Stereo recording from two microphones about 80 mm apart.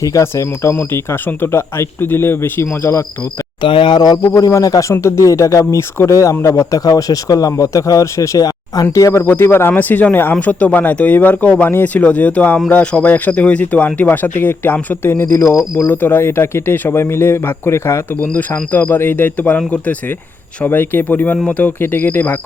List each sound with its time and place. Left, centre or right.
0.0 s speech: left
3.6 s speech: left
4.3 s speech: left
9.2 s speech: left
15.3 s speech: left
15.9 s speech: left